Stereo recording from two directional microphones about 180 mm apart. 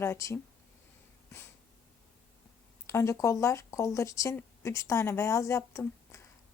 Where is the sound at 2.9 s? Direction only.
15° left (ahead or behind).